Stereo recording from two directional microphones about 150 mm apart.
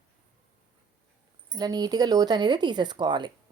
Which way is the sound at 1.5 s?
25° right (ahead or behind).